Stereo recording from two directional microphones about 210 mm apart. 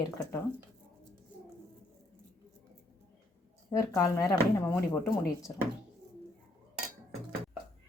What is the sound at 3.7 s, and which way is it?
Speech, 15° left (ahead or behind).